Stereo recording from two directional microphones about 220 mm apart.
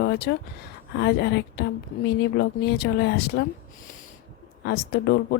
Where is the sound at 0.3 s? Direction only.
45° left (ahead or behind).